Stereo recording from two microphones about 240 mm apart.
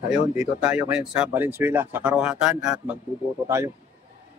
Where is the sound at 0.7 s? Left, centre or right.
Centre.